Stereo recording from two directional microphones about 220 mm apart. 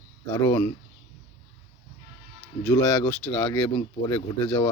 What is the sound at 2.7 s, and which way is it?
Speech, 15° left (ahead or behind).